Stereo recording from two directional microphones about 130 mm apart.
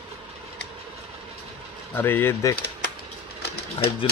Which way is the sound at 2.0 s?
15° left (ahead or behind).